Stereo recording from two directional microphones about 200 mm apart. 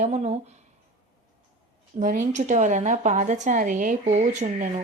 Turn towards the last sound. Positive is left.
turn(degrees=-40)  # may be behind; listen again after turning